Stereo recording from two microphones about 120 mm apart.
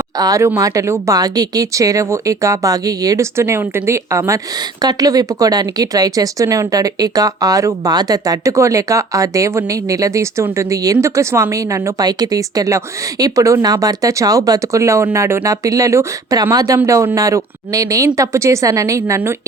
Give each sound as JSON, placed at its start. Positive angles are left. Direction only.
{"t": 0.2, "sound": "speech", "side_deg": -30}